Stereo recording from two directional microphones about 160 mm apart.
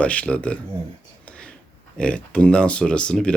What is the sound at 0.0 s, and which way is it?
Speech, 10° left (ahead or behind).